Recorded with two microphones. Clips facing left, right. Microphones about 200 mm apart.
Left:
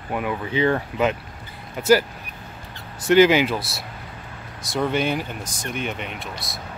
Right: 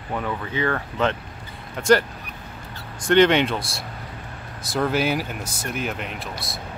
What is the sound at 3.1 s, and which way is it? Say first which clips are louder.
Speech: left 1 dB; 5° left (ahead or behind).